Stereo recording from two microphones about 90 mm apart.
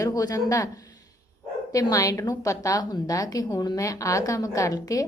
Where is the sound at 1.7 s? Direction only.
40° left (ahead or behind).